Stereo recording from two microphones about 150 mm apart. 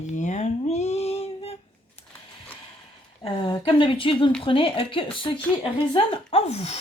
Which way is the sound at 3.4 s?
35° left (ahead or behind).